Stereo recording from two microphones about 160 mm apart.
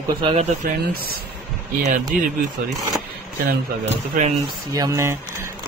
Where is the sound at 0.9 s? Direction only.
70° right (ahead or behind).